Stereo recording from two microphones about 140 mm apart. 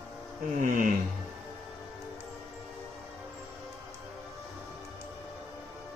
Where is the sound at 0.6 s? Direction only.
70° right (ahead or behind).